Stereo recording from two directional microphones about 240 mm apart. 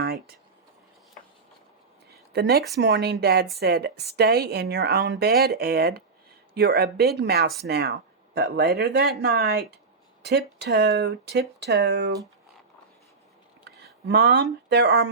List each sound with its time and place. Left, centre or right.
0.0 s a sound: right
2.3 s a woman's voice: right
13.7 s speech: right